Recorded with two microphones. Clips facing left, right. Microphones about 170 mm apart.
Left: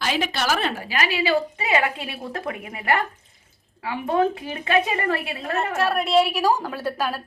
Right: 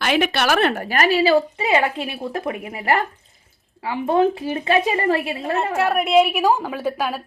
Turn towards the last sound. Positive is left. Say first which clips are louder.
# right 3 dB
turn(degrees=-15)  # may be behind; listen again after turning